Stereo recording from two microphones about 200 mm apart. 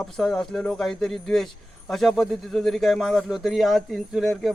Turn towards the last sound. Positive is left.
turn(degrees=0)  # may be behind; listen again after turning